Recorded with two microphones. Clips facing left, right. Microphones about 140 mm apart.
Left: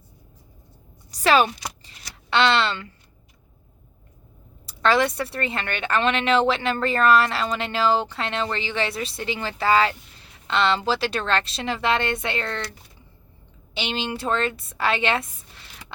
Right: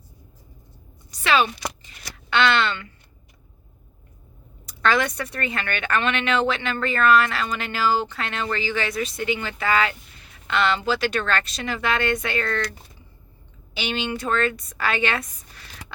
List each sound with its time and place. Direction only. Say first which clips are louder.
1.1 s a woman's voice: left 2 dB; 40° left (ahead or behind)
4.6 s a woman's voice: left 2 dB; 30° left (ahead or behind)
13.7 s a woman's voice: right 1 dB; 25° left (ahead or behind)